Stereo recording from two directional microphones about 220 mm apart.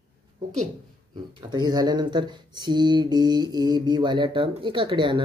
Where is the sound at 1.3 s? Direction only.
20° right (ahead or behind).